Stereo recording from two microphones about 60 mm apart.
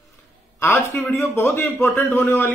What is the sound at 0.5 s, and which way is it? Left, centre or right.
A man's voice, left.